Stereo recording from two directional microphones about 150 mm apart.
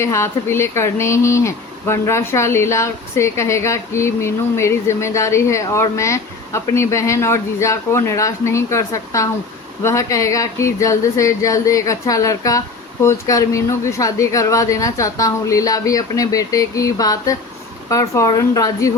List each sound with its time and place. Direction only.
0.0 s speech: 20° left (ahead or behind)